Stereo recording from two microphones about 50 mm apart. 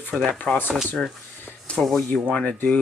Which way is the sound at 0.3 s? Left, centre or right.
Left.